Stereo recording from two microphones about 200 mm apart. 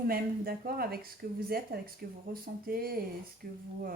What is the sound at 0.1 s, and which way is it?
Speech, 50° right (ahead or behind).